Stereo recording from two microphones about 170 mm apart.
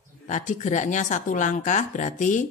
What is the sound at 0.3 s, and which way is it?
Speech, 45° left (ahead or behind).